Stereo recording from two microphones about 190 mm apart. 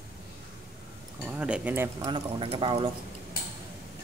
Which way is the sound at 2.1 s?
25° right (ahead or behind).